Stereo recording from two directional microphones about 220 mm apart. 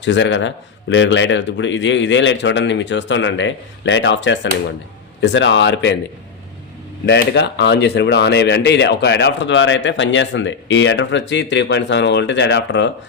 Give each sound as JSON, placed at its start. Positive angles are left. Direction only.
{"t": 0.0, "sound": "speech", "side_deg": 55}
{"t": 7.0, "sound": "speech", "side_deg": 50}